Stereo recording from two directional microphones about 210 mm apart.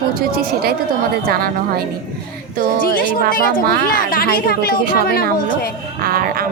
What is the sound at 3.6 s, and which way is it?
Speech, 45° right (ahead or behind).